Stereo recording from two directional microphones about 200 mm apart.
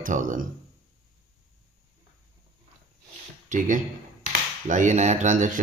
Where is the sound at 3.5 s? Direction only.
40° right (ahead or behind).